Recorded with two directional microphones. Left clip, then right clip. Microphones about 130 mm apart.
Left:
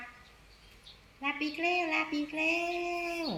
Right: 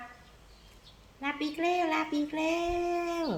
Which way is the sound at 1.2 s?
35° right (ahead or behind).